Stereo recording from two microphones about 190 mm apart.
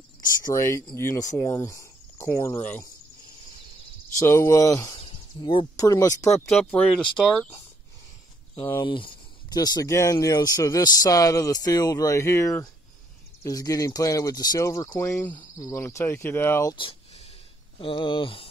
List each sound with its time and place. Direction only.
0.2 s speech: 20° left (ahead or behind)
4.2 s speech: 15° left (ahead or behind)
6.3 s speech: centre (ahead or behind)
8.8 s speech: 25° left (ahead or behind)
15.0 s speech: 5° left (ahead or behind)
15.3 s speech: 15° left (ahead or behind)
16.7 s a sound: 30° left (ahead or behind)
17.7 s speech: 25° left (ahead or behind)